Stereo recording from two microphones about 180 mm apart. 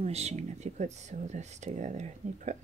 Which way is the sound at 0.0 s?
35° right (ahead or behind).